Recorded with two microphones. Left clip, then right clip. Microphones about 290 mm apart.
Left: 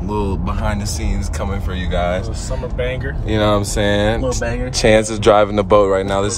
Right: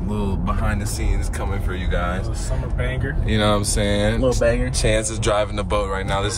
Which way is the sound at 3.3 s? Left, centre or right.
Centre.